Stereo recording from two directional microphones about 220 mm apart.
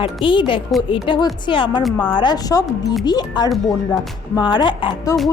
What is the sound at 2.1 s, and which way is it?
Speech, 20° left (ahead or behind).